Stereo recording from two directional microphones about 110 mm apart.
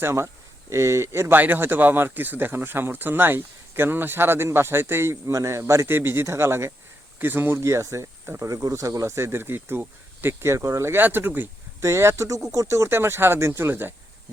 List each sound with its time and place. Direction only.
0.0 s speech: 25° right (ahead or behind)